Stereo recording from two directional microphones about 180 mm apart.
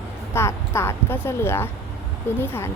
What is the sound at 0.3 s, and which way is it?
A woman's voice, 15° left (ahead or behind).